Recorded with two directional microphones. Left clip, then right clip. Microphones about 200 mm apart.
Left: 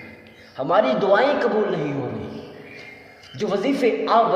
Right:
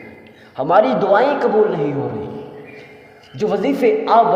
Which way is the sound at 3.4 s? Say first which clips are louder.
Right 4 dB; 20° right (ahead or behind).